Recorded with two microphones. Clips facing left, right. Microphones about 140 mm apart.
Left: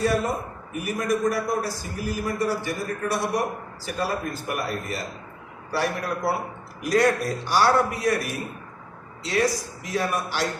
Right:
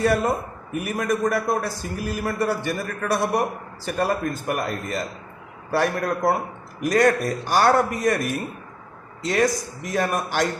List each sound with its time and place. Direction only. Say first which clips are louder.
0.0 s a man's voice: right 3 dB; 60° right (ahead or behind)
5.7 s a man's voice: right 4 dB; 50° right (ahead or behind)